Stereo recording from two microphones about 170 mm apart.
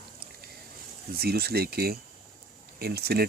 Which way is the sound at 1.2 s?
65° right (ahead or behind).